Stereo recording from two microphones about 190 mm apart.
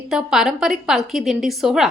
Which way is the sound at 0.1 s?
Centre (ahead or behind).